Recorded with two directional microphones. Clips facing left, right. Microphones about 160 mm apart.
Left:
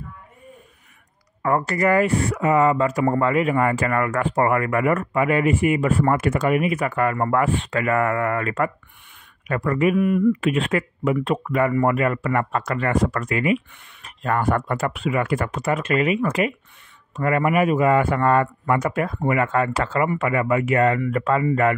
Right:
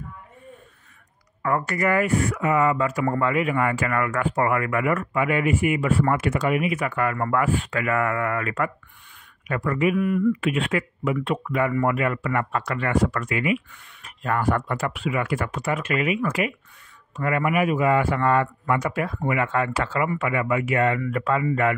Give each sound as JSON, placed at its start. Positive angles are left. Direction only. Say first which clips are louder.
{"t": 1.4, "sound": "a man's voice", "louder": "left 3 dB", "side_deg": 30}
{"t": 9.9, "sound": "speech", "louder": "left 3 dB", "side_deg": 20}
{"t": 10.4, "sound": "a man's voice", "louder": "left 3 dB", "side_deg": 40}